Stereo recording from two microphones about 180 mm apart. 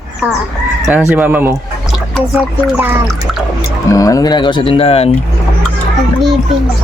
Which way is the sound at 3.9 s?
20° left (ahead or behind).